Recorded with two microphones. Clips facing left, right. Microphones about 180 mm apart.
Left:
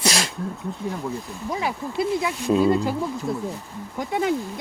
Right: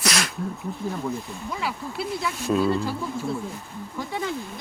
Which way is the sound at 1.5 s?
20° left (ahead or behind).